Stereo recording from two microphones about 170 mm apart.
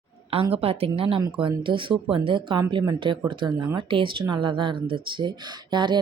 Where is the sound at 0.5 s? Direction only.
35° right (ahead or behind).